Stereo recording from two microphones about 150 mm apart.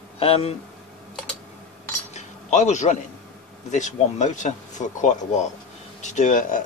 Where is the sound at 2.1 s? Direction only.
50° left (ahead or behind).